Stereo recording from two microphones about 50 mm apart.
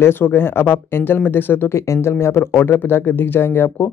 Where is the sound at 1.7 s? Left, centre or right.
Left.